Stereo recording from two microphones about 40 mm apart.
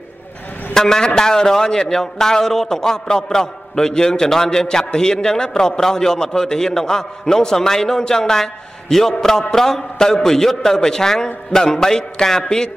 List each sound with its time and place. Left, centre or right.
0.7 s a man's voice: centre